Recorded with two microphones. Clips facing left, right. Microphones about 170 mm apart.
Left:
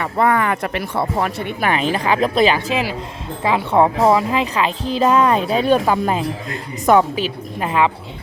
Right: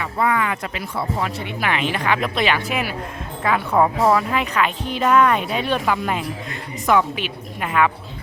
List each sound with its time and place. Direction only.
0.0 s speech: 50° left (ahead or behind)
3.4 s speech: 25° left (ahead or behind)